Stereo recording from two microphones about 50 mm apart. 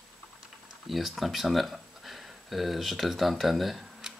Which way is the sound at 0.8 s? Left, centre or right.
Centre.